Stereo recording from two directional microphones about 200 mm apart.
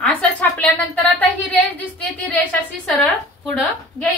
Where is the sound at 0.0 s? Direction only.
5° left (ahead or behind).